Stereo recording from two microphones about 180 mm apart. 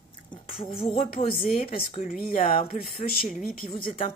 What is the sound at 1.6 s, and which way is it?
Speech, 50° left (ahead or behind).